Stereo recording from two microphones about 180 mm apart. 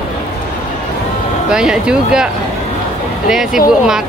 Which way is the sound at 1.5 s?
5° right (ahead or behind).